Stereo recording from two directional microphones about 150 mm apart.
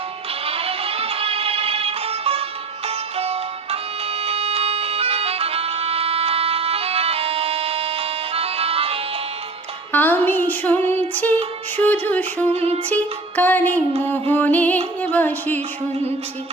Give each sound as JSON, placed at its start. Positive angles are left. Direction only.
{"t": 0.4, "sound": "music", "side_deg": -40}
{"t": 9.9, "sound": "female singing", "side_deg": 10}
{"t": 11.8, "sound": "a sound", "side_deg": 10}
{"t": 12.5, "sound": "music", "side_deg": -45}
{"t": 12.9, "sound": "music", "side_deg": 10}
{"t": 15.0, "sound": "speech", "side_deg": 10}